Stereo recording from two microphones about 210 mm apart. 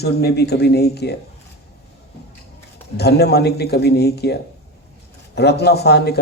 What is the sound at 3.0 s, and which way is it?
A man's voice, 50° left (ahead or behind).